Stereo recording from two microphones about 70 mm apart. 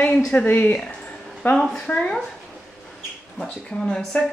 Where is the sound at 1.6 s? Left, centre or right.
Centre.